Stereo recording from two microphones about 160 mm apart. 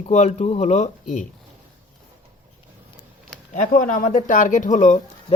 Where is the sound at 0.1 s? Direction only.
45° left (ahead or behind).